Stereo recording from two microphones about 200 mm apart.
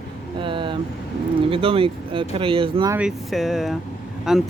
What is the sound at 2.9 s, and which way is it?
Speech, 5° right (ahead or behind).